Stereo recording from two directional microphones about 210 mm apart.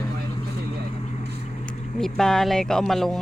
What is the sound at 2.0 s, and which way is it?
Speech, centre (ahead or behind).